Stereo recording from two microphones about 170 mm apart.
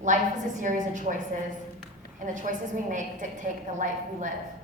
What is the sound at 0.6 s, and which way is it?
Speech, 45° right (ahead or behind).